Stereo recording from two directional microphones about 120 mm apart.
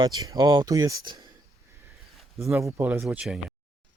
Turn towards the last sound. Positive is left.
turn(degrees=-10)  # may be behind; listen again after turning